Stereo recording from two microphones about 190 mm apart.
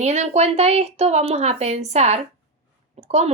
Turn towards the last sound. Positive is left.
turn(degrees=-35)  # may be behind; listen again after turning